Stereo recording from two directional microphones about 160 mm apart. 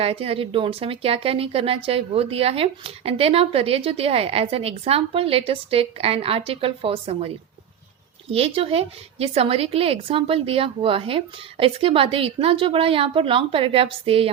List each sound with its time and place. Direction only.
0.0 s speech: 35° right (ahead or behind)
8.3 s speech: 35° right (ahead or behind)